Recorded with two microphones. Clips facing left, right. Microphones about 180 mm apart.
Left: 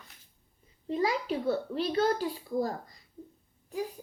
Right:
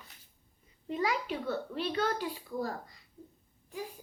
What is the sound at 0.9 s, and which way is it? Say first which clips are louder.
A child's voice: left 3 dB; 35° left (ahead or behind).